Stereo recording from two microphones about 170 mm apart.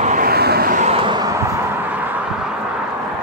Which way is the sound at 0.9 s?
25° right (ahead or behind).